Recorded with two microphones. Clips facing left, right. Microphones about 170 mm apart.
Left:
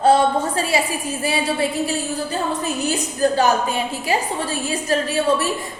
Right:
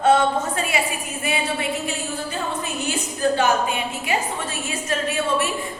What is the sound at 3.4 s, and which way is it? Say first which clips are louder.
A woman's voice: left 2 dB; 35° left (ahead or behind).